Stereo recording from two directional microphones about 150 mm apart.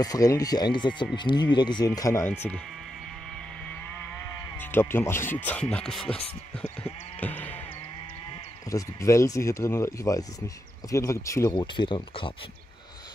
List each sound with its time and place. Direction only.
0.0 s speech: 25° left (ahead or behind)
4.2 s speech: 15° left (ahead or behind)
8.6 s speech: 20° left (ahead or behind)